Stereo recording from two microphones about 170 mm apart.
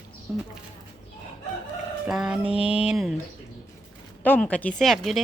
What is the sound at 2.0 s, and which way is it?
A woman's voice, 5° right (ahead or behind).